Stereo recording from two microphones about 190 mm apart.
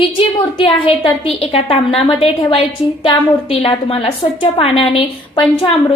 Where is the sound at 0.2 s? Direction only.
25° left (ahead or behind).